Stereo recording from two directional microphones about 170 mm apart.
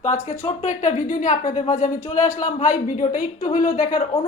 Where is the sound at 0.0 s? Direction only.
45° left (ahead or behind).